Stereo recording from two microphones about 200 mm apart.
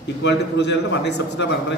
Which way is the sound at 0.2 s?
60° left (ahead or behind).